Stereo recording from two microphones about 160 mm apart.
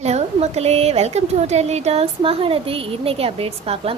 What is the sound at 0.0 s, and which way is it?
A woman's voice, 40° right (ahead or behind).